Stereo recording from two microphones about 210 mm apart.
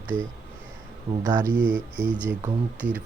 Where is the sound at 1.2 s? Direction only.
20° right (ahead or behind).